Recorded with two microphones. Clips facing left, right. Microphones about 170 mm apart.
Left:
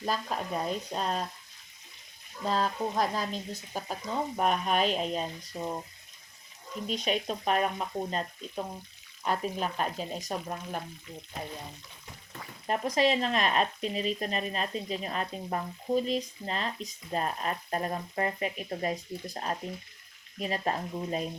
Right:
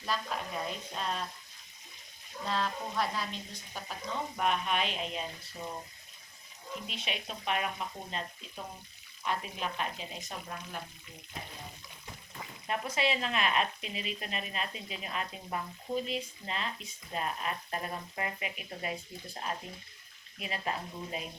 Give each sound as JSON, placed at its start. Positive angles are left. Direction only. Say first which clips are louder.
{"t": 0.0, "sound": "speech", "louder": "left 4 dB", "side_deg": 40}
{"t": 2.4, "sound": "speech", "louder": "left 5 dB", "side_deg": 40}
{"t": 6.8, "sound": "speech", "louder": "left 12 dB", "side_deg": 40}
{"t": 12.6, "sound": "speech", "louder": "left 6 dB", "side_deg": 40}